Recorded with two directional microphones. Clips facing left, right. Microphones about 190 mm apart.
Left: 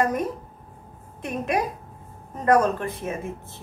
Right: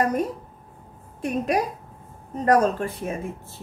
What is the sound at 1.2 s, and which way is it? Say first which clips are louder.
A woman's voice: right 2 dB; 35° right (ahead or behind).